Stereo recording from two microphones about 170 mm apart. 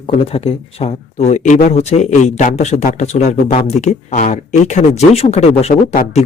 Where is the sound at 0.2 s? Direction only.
35° left (ahead or behind).